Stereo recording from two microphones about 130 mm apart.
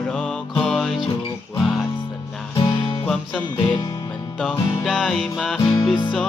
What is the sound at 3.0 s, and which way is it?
Music, 10° left (ahead or behind).